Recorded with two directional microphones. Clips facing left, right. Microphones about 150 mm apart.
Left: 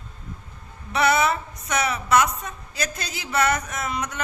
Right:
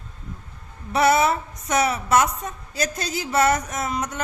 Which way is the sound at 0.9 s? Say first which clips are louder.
Right 2 dB; 45° right (ahead or behind).